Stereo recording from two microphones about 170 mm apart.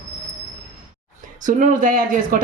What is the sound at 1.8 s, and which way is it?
Speech, 55° right (ahead or behind).